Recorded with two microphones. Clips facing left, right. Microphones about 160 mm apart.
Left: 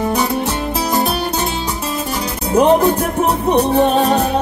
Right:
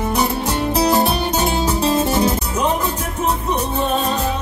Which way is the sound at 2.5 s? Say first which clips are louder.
Left 8 dB; 60° left (ahead or behind).